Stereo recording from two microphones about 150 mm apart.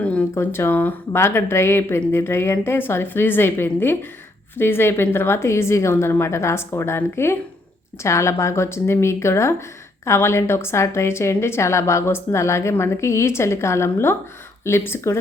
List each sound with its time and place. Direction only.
0.0 s a woman's voice: 10° left (ahead or behind)